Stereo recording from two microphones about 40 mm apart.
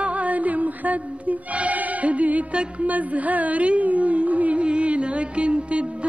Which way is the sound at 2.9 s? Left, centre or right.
Right.